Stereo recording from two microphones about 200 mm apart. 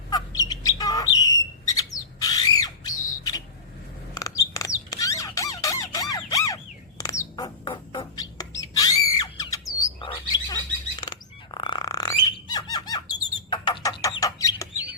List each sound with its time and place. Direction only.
0.1 s bird: 20° left (ahead or behind)
4.1 s squeak: 15° left (ahead or behind)
7.0 s bird: 15° left (ahead or behind)